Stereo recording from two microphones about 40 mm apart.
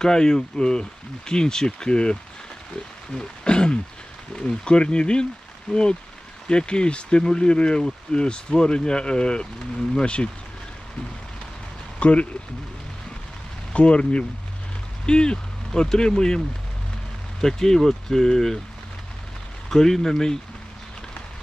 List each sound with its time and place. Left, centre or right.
0.0 s speech: centre
3.2 s speech: left
12.0 s speech: left
13.7 s speech: left
15.0 s speech: centre
19.7 s speech: centre